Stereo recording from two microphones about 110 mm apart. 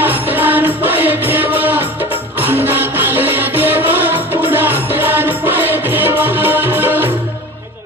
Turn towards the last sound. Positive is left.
turn(degrees=-20)  # may be behind; listen again after turning